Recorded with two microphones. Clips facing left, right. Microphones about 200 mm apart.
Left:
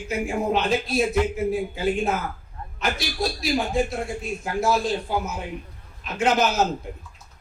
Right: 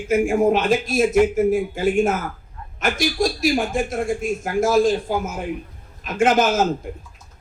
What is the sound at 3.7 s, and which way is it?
Speech, 50° right (ahead or behind).